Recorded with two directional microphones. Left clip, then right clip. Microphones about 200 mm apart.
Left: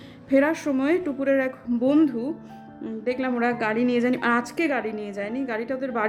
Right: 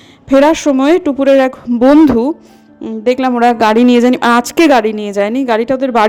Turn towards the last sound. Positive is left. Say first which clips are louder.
# right 16 dB
turn(degrees=-40)  # may be behind; listen again after turning